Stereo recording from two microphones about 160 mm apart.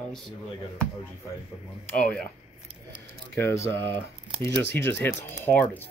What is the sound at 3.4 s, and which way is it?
Speech, 15° left (ahead or behind).